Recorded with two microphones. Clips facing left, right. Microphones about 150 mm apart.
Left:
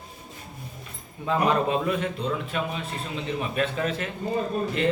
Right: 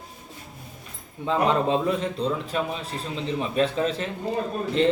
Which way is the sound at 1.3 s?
25° right (ahead or behind).